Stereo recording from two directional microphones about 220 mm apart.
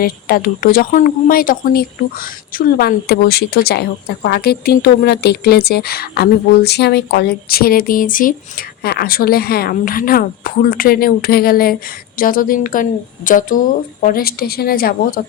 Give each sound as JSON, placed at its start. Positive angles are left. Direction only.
{"t": 0.0, "sound": "speech", "side_deg": 40}